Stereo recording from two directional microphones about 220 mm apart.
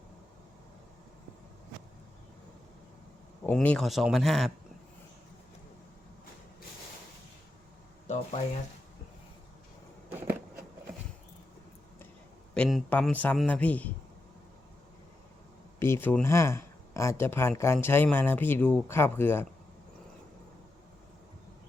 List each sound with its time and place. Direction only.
3.4 s a man's voice: 5° left (ahead or behind)
8.0 s a sound: 30° left (ahead or behind)
12.5 s a man's voice: 5° left (ahead or behind)
15.8 s speech: 10° left (ahead or behind)